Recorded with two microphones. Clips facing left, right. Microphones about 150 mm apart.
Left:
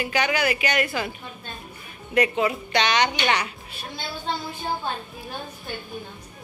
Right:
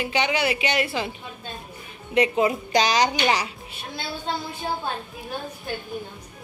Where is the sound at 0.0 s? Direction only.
25° right (ahead or behind).